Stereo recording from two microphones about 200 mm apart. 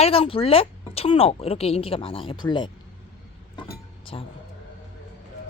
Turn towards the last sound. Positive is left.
turn(degrees=25)  # may be behind; listen again after turning